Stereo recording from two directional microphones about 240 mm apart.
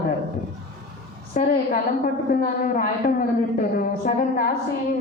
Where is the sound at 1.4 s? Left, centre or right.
Left.